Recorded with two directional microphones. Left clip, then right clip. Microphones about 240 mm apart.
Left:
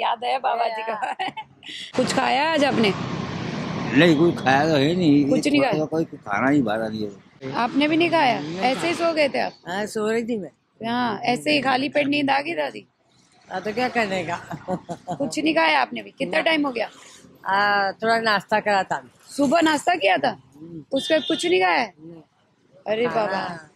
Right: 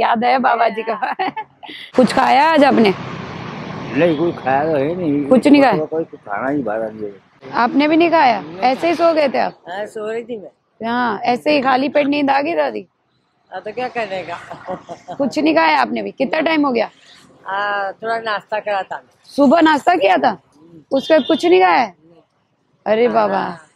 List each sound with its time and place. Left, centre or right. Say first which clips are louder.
0.0 s speech: right 8 dB; right
3.9 s speech: right 1 dB; left
5.4 s speech: right 9 dB; right
5.9 s speech: right 2 dB; left
7.5 s a woman's voice: right 7 dB; right
9.7 s speech: right 1 dB; left
10.8 s a woman's voice: right 6 dB; right
13.5 s speech: right 1 dB; left
15.2 s a woman's voice: right 6 dB; right
17.4 s speech: even; left
19.3 s a woman's voice: right 7 dB; right